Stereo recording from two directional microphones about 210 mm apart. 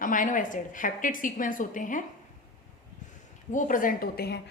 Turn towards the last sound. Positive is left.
turn(degrees=50)  # may be behind; listen again after turning